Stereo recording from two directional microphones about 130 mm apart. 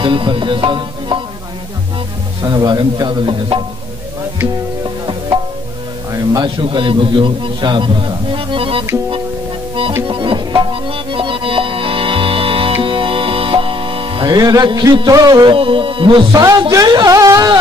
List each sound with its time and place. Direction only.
0.0 s music: 40° right (ahead or behind)
2.4 s music: 30° right (ahead or behind)
6.1 s speech: 30° right (ahead or behind)
6.6 s a man's voice: 40° right (ahead or behind)
10.0 s music: 40° right (ahead or behind)
15.5 s music: 40° right (ahead or behind); by 17.6 s 25° right (ahead or behind)